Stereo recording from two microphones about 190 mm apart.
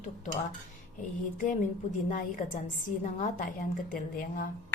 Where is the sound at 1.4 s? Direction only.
45° left (ahead or behind).